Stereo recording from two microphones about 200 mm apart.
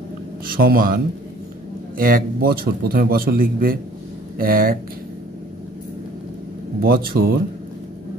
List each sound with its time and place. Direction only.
0.5 s a man's voice: 45° right (ahead or behind)
6.8 s a man's voice: 50° right (ahead or behind)